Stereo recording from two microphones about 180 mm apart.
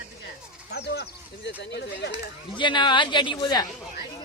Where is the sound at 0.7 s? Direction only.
70° left (ahead or behind).